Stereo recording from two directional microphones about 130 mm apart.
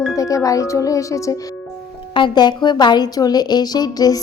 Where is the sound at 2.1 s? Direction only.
35° left (ahead or behind).